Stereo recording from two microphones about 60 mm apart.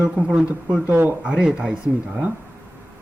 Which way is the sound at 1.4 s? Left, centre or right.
Centre.